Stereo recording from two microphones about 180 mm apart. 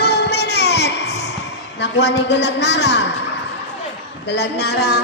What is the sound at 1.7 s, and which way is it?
A woman's voice, 75° left (ahead or behind).